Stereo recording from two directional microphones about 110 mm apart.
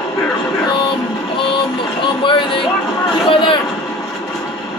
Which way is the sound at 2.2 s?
50° left (ahead or behind).